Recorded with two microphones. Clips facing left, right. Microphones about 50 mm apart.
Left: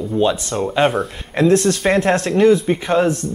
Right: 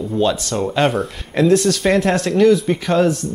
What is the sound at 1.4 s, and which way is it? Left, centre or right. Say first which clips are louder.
Speech: even; left.